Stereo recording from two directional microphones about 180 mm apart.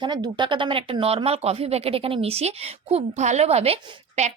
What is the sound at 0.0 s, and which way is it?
Speech, 25° right (ahead or behind).